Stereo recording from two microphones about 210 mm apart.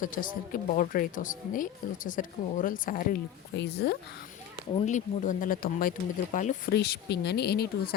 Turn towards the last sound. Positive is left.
turn(degrees=45)  # may be behind; listen again after turning